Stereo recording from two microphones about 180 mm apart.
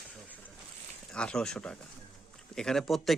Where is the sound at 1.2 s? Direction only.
5° left (ahead or behind).